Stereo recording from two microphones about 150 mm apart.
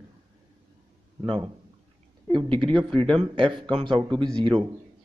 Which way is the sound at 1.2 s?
35° right (ahead or behind).